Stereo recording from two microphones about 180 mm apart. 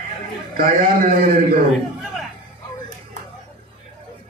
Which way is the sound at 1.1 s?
50° right (ahead or behind).